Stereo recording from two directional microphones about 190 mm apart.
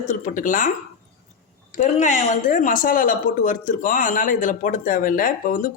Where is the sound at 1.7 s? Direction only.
40° left (ahead or behind).